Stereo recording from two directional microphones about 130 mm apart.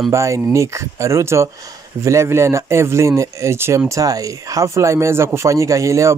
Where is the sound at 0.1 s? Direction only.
25° right (ahead or behind).